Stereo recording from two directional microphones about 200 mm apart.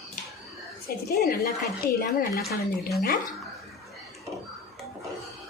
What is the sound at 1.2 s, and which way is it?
Speech, 50° left (ahead or behind).